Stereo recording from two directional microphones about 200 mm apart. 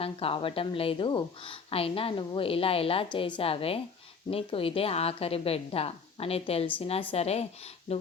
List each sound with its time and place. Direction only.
0.0 s a woman's voice: 30° left (ahead or behind)